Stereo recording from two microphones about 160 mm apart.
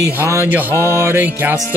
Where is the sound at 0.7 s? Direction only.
15° left (ahead or behind).